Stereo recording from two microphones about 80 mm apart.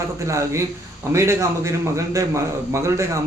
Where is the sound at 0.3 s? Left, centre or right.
Right.